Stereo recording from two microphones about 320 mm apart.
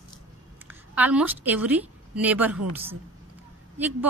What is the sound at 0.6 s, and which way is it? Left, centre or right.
A woman's voice, centre.